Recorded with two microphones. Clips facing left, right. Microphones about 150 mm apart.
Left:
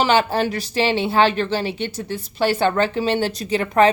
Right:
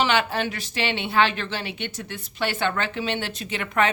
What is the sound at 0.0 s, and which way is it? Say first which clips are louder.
A woman's voice: left 5 dB; 35° left (ahead or behind).